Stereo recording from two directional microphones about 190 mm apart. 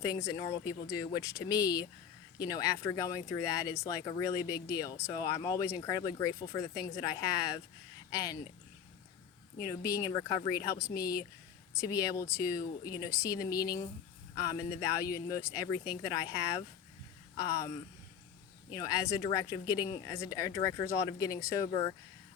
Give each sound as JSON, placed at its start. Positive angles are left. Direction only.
{"t": 0.0, "sound": "speech", "side_deg": 15}
{"t": 9.9, "sound": "speech", "side_deg": 20}
{"t": 10.8, "sound": "a woman's voice", "side_deg": 55}
{"t": 11.7, "sound": "speech", "side_deg": 15}
{"t": 18.7, "sound": "speech", "side_deg": 20}